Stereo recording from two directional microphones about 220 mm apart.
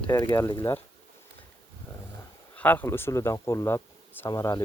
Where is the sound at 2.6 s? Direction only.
10° left (ahead or behind).